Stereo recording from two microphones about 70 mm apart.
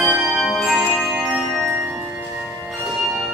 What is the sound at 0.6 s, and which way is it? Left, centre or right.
Music, centre.